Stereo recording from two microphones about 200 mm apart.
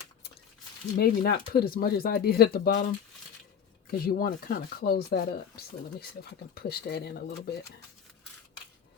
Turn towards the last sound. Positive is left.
turn(degrees=50)  # may be behind; listen again after turning